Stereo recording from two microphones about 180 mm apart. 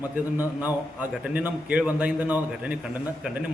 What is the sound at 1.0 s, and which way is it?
A man's voice, 10° right (ahead or behind).